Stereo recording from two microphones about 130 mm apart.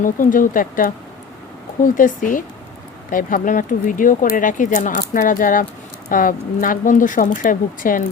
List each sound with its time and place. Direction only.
0.0 s speech: 90° left